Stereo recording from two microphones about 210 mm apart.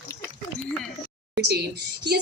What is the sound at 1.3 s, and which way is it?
Speech, 50° right (ahead or behind).